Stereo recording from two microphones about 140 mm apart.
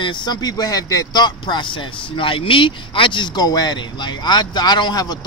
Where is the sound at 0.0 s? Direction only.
35° left (ahead or behind).